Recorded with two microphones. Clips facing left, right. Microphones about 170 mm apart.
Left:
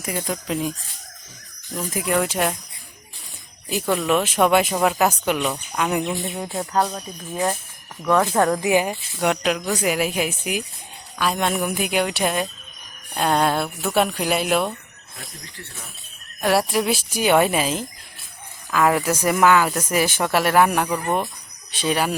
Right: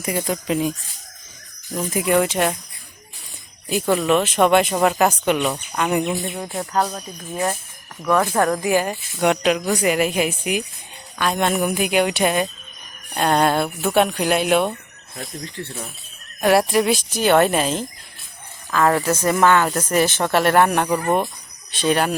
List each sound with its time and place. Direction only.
0.0 s speech: 5° right (ahead or behind)
1.9 s speech: centre (ahead or behind)
3.7 s speech: centre (ahead or behind)
8.3 s speech: 15° left (ahead or behind)
9.2 s speech: centre (ahead or behind)
16.4 s speech: centre (ahead or behind)
20.8 s speech: 5° right (ahead or behind)
21.7 s speech: 5° left (ahead or behind)